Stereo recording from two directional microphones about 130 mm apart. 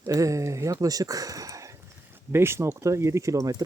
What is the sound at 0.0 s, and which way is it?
Speech, 25° right (ahead or behind).